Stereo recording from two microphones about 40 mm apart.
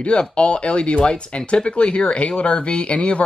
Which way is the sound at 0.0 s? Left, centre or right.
Left.